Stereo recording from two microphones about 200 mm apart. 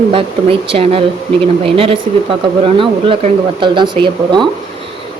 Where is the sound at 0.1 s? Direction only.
25° right (ahead or behind).